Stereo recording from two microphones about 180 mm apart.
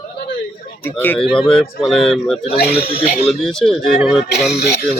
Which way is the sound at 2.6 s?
60° left (ahead or behind).